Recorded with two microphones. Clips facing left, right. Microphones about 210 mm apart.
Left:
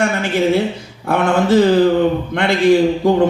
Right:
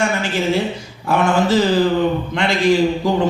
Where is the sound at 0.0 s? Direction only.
60° left (ahead or behind).